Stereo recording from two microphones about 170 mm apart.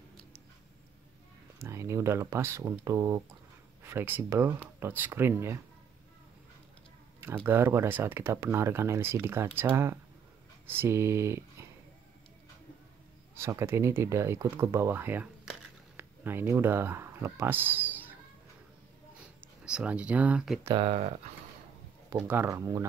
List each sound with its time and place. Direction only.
1.6 s speech: 15° right (ahead or behind)
7.2 s speech: 15° right (ahead or behind)
13.4 s speech: 15° right (ahead or behind)
19.4 s speech: 5° right (ahead or behind)
20.7 s speech: 35° right (ahead or behind)
22.1 s speech: 15° right (ahead or behind)